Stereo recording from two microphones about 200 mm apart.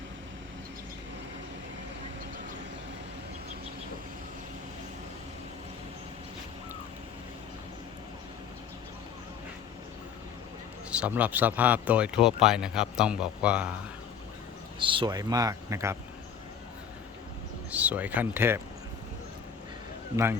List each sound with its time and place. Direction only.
10.9 s speech: 5° right (ahead or behind)
14.8 s speech: 25° right (ahead or behind)
17.7 s speech: 5° right (ahead or behind)